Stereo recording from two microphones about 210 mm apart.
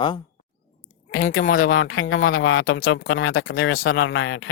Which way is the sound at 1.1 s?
70° left (ahead or behind).